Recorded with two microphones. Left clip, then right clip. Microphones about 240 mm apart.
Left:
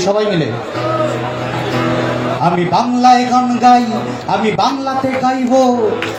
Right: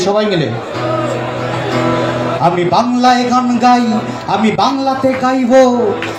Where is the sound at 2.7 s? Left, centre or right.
Right.